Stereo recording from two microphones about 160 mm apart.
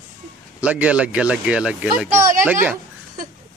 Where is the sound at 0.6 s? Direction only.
10° right (ahead or behind).